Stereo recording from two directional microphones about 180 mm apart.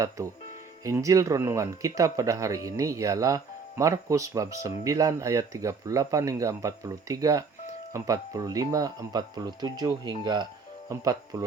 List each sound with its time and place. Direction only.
0.9 s speech: 20° right (ahead or behind)